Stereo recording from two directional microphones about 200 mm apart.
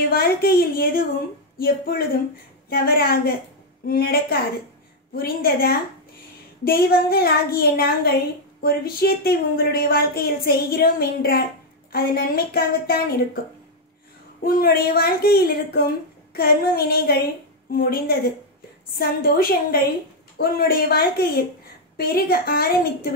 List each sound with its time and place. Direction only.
0.1 s speech: 50° left (ahead or behind)
14.4 s speech: 45° left (ahead or behind)